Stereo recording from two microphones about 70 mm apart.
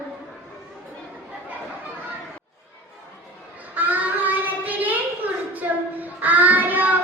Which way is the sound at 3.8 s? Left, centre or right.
Right.